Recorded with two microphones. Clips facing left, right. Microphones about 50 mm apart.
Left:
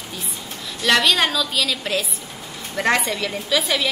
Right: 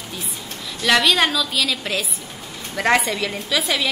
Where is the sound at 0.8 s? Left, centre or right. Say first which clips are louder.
Right 1 dB; centre.